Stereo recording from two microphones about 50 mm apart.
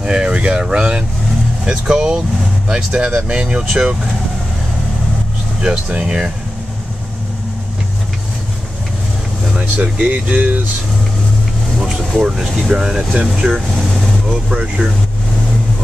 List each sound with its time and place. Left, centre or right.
0.0 s speech: centre
5.9 s speech: right
9.6 s speech: right
12.4 s speech: centre
14.5 s speech: centre